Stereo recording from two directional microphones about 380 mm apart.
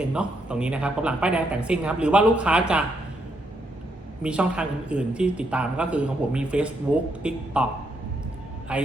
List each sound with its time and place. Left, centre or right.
0.0 s speech: centre
4.2 s speech: centre
8.7 s speech: centre